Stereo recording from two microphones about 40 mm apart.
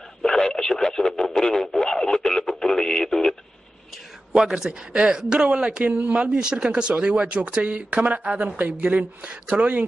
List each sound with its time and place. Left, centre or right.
0.2 s radio: centre
4.6 s speech: centre
5.4 s speech: right
5.9 s speech: right